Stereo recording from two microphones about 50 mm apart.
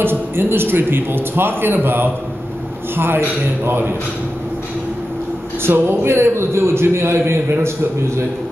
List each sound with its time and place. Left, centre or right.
0.0 s a man's voice: right
5.6 s a man's voice: right